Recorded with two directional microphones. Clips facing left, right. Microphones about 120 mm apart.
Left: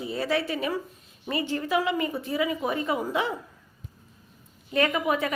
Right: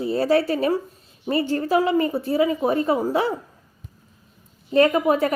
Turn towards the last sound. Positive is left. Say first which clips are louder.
# right 7 dB
turn(degrees=-40)  # may be behind; listen again after turning